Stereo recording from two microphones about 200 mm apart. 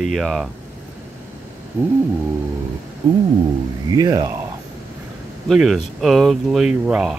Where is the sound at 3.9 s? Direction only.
20° right (ahead or behind).